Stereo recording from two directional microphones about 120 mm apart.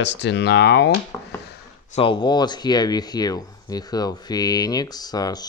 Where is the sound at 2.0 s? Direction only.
40° left (ahead or behind).